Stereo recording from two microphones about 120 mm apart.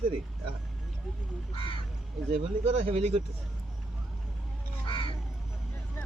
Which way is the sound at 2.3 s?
60° right (ahead or behind).